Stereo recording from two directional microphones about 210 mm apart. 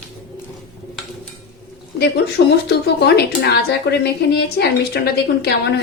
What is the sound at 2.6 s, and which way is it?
A woman's voice, 50° left (ahead or behind).